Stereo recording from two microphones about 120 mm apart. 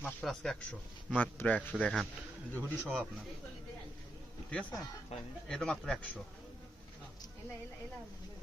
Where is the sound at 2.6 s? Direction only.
15° left (ahead or behind).